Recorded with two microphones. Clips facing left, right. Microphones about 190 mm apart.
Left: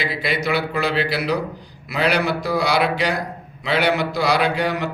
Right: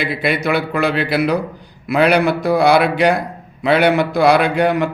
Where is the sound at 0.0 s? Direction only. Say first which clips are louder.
Right 5 dB; 55° right (ahead or behind).